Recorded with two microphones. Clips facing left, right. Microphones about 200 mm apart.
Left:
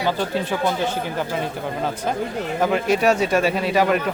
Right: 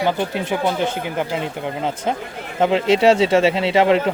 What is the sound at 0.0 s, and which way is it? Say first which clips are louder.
Speech: right 2 dB; 15° right (ahead or behind).